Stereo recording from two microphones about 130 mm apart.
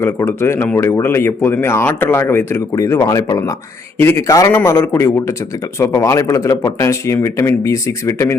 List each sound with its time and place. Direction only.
0.0 s speech: 15° left (ahead or behind)
3.9 s speech: 20° left (ahead or behind)